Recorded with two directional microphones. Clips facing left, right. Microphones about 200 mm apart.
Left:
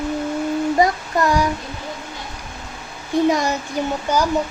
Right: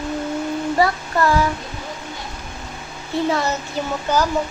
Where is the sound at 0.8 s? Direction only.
15° left (ahead or behind).